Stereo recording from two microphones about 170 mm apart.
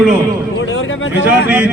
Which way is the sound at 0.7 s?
90° left.